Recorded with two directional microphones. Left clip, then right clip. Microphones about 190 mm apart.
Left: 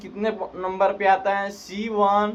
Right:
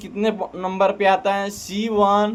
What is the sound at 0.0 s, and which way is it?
Speech, 50° right (ahead or behind).